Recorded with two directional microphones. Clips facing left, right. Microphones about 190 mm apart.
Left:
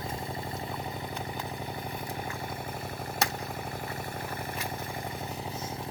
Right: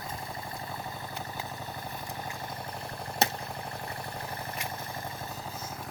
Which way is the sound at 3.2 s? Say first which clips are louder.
Right 3 dB; 25° right (ahead or behind).